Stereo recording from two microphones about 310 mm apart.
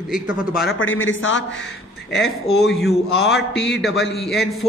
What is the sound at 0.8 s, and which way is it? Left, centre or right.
Speech, left.